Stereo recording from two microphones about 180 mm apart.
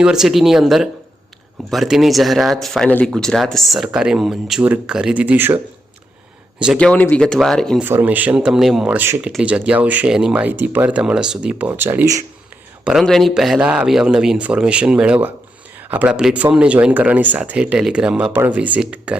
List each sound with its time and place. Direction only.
0.0 s speech: 5° right (ahead or behind)
6.7 s speech: 10° left (ahead or behind)
7.9 s speech: 10° right (ahead or behind)
12.8 s speech: centre (ahead or behind)